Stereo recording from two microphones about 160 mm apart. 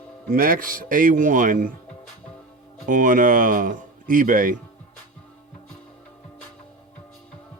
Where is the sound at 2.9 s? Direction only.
55° right (ahead or behind).